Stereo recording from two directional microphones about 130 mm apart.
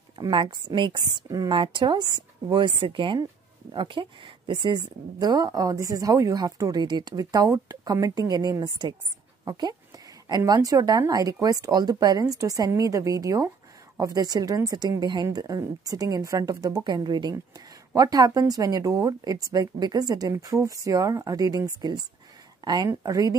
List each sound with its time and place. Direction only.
0.2 s a woman's voice: 40° right (ahead or behind)